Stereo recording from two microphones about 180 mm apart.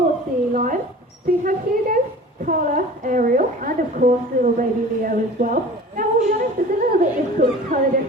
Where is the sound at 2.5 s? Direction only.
50° right (ahead or behind).